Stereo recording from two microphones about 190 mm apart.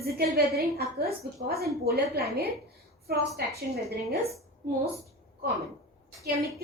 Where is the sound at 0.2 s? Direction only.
55° right (ahead or behind).